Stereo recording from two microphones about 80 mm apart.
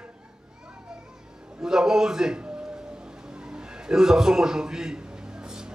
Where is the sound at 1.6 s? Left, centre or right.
Centre.